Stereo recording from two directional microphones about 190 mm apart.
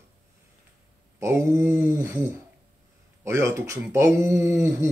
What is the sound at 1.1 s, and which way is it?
Speech, 15° right (ahead or behind).